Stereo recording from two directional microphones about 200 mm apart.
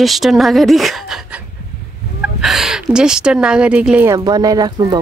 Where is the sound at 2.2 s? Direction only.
Centre (ahead or behind).